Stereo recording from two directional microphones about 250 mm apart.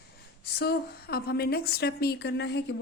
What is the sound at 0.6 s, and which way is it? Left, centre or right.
A woman's voice, left.